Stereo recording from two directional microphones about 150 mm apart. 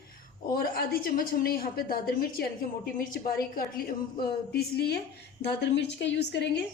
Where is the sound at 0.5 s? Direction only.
75° left (ahead or behind).